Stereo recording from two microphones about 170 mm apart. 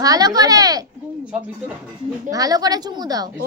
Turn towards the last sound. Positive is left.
turn(degrees=-25)  # may be behind; listen again after turning